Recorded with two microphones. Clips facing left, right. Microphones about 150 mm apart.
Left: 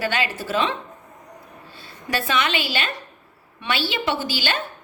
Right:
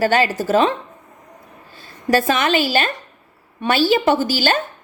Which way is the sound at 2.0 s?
45° right (ahead or behind).